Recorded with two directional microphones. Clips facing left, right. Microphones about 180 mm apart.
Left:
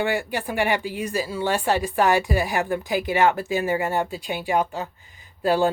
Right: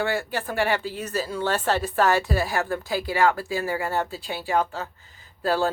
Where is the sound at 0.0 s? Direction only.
15° left (ahead or behind).